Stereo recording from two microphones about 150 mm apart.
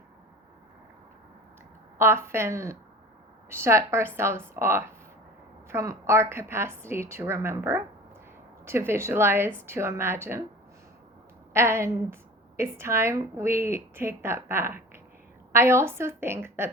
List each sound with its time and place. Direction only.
2.0 s a woman's voice: 15° right (ahead or behind)
11.5 s a woman's voice: 15° right (ahead or behind)